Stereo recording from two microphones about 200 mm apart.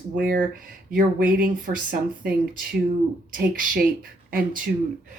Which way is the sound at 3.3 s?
45° right (ahead or behind).